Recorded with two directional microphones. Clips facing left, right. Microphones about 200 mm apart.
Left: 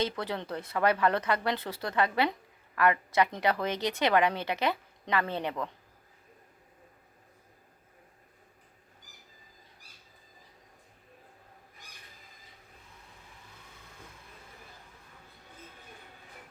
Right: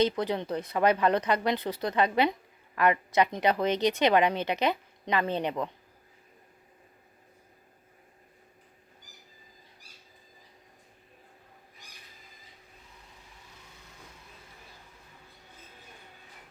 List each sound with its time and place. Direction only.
0.0 s a woman's voice: 20° right (ahead or behind)